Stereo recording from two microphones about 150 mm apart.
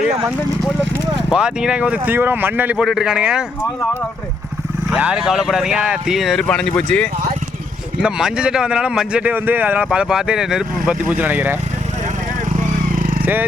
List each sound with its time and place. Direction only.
1.3 s speech: 5° right (ahead or behind)
4.9 s speech: 5° right (ahead or behind)
8.0 s speech: 5° right (ahead or behind)
12.5 s vehicle: 65° right (ahead or behind)